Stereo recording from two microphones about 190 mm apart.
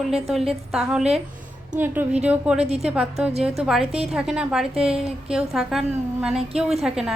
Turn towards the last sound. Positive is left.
turn(degrees=-5)  # may be behind; listen again after turning